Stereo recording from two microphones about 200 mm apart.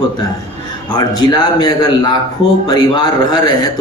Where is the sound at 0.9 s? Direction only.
20° left (ahead or behind).